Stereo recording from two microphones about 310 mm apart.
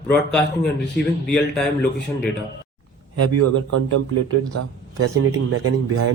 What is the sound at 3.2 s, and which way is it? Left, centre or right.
Speech, right.